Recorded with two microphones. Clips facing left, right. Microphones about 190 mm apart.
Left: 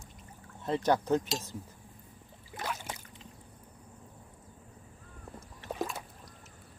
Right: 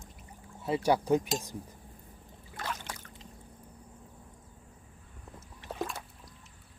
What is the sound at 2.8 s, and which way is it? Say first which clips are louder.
Boat: left 1 dB; 15° left (ahead or behind).